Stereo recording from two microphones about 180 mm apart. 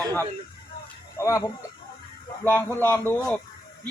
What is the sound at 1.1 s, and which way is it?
Speech, 15° left (ahead or behind).